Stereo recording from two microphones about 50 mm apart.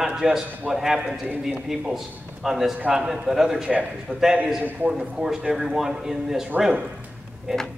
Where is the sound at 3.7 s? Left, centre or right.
Centre.